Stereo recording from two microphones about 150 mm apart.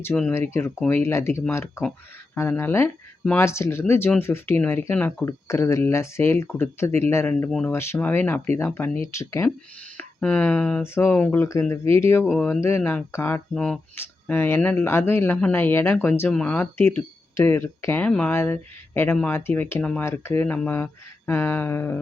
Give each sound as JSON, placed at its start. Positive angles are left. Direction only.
{"t": 0.0, "sound": "speech", "side_deg": 10}
{"t": 12.2, "sound": "speech", "side_deg": 5}